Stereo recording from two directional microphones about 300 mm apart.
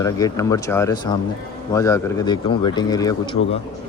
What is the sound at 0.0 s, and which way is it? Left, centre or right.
Speech, centre.